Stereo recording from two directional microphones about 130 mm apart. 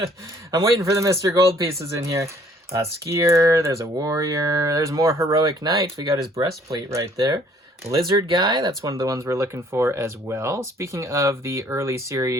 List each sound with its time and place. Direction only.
0.5 s speech: 25° right (ahead or behind)